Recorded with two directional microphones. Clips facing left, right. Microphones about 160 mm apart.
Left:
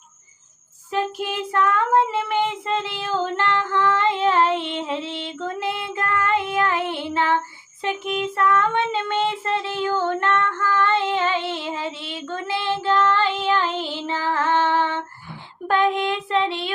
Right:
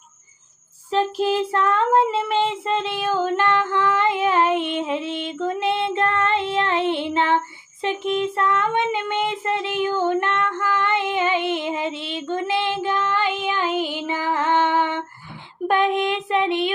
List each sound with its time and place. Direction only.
1.2 s child singing: 30° right (ahead or behind)